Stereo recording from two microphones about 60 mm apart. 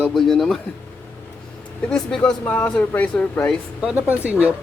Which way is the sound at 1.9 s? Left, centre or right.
Centre.